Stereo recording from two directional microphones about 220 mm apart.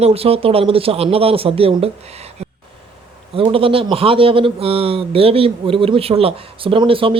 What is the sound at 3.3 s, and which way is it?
A man's voice, 25° right (ahead or behind).